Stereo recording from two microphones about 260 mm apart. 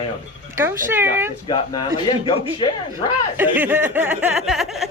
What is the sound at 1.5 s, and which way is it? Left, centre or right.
Speech, centre.